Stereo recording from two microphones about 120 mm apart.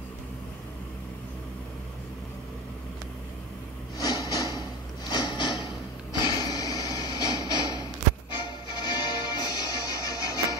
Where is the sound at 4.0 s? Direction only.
30° left (ahead or behind).